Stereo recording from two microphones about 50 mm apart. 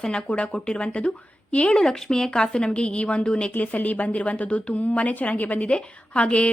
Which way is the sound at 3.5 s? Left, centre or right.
Left.